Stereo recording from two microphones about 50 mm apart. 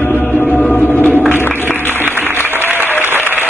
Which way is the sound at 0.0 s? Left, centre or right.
Left.